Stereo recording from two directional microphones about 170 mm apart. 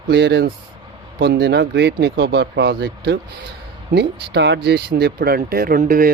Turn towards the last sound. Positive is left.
turn(degrees=-55)  # may be behind; listen again after turning